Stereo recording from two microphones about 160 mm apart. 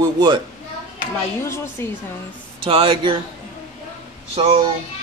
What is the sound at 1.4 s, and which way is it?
Speech, 15° left (ahead or behind).